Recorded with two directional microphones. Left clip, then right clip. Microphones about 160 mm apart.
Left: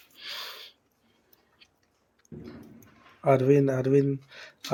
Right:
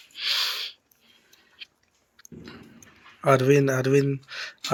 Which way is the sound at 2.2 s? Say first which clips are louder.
Right 4 dB; 5° left (ahead or behind).